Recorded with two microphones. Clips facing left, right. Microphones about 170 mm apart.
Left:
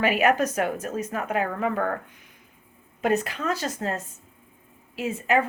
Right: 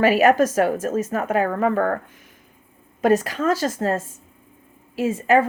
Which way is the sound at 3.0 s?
45° right (ahead or behind).